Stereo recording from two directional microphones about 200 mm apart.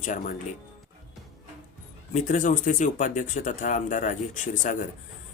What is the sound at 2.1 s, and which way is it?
Speech, 40° left (ahead or behind).